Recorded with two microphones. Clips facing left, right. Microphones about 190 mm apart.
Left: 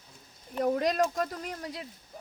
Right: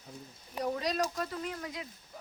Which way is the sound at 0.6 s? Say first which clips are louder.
Left 6 dB; 50° left (ahead or behind).